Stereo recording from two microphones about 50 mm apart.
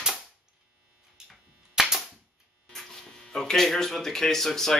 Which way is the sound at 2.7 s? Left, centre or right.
Centre.